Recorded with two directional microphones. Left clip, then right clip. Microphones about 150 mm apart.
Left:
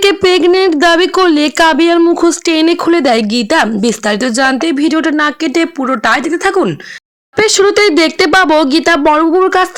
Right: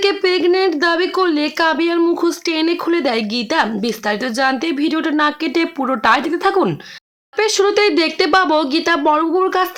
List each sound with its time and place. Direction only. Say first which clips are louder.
0.0 s speech: left 6 dB; 60° left (ahead or behind)
2.0 s speech: left 7 dB; 40° left (ahead or behind)
2.5 s speech: left 7 dB; 55° left (ahead or behind); by 6.7 s 25° left (ahead or behind)
7.3 s speech: left 6 dB; 50° left (ahead or behind)